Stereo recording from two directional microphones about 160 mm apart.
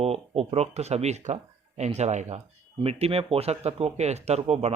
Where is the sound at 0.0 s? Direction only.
40° right (ahead or behind).